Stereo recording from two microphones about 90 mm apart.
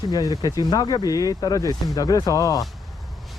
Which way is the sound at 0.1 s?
45° left (ahead or behind).